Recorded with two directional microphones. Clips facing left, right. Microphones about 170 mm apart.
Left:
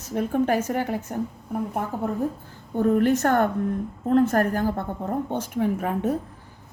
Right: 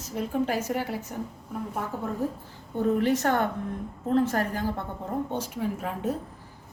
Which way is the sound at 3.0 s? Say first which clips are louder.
Left 5 dB; 50° left (ahead or behind).